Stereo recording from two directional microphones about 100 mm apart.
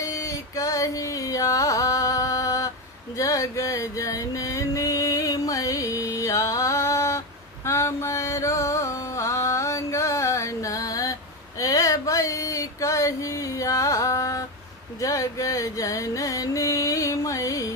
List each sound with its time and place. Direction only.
0.0 s carnatic music: 30° left (ahead or behind)
3.2 s music: 30° left (ahead or behind)
7.6 s mantra: 30° left (ahead or behind)
11.6 s a sound: 35° left (ahead or behind)
15.0 s music: 35° left (ahead or behind)